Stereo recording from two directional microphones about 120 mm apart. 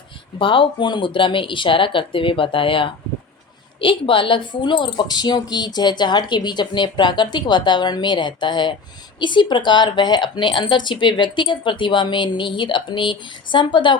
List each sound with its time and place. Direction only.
0.3 s a woman's voice: 45° left (ahead or behind)